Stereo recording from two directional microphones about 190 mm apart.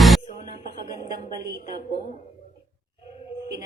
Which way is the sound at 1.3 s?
20° right (ahead or behind).